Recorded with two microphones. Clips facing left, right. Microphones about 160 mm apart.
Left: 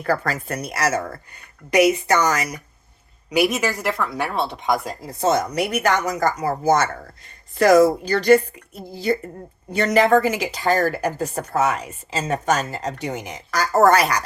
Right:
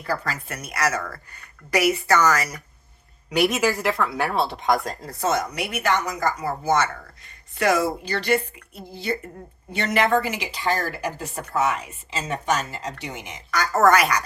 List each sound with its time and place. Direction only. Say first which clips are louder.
0.3 s a woman's voice: left 6 dB; 40° left (ahead or behind); by 2.6 s 20° left (ahead or behind)
3.2 s a woman's voice: left 1 dB; centre (ahead or behind)
4.9 s speech: left 4 dB; 15° left (ahead or behind)
5.3 s a woman's voice: left 6 dB; 40° left (ahead or behind)